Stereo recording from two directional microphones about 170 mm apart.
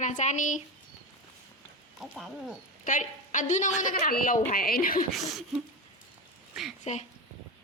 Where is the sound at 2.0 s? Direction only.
Centre (ahead or behind).